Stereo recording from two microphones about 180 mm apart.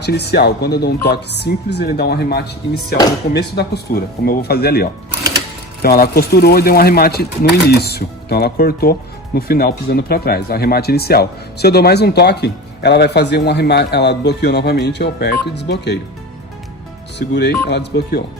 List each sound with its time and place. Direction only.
0.0 s speech: 65° left (ahead or behind)
17.2 s speech: 70° left (ahead or behind)